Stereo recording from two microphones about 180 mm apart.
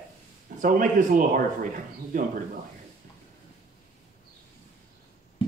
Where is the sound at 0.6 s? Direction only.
50° right (ahead or behind).